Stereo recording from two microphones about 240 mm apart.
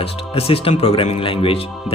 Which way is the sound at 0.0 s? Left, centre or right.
Left.